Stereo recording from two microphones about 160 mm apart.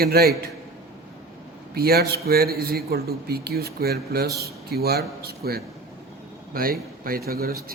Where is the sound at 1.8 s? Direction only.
75° right (ahead or behind).